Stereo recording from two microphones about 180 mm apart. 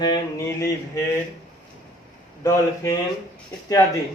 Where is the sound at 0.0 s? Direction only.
20° left (ahead or behind).